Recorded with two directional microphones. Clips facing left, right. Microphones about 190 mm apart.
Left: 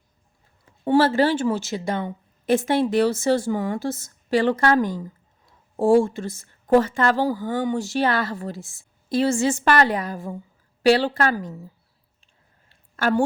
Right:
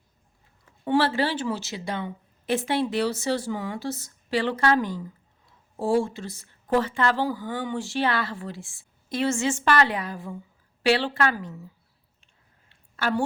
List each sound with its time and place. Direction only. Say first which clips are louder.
0.9 s a woman's voice: left 5 dB; 45° left (ahead or behind)
12.2 s clicking: left 2 dB; 45° left (ahead or behind)